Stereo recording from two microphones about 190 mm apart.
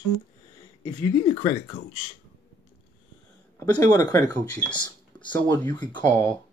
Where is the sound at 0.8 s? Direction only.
25° left (ahead or behind).